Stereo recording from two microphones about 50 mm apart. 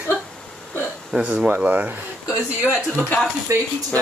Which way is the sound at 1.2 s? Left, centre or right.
Right.